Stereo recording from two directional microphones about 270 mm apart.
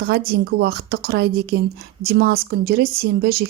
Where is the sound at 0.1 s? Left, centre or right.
Right.